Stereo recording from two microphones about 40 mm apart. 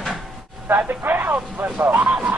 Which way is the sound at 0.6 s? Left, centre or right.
Right.